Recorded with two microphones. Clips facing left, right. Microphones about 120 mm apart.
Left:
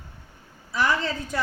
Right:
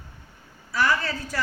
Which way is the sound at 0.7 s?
20° left (ahead or behind).